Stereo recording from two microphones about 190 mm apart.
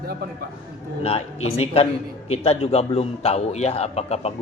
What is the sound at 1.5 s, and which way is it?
A man's voice, 30° left (ahead or behind).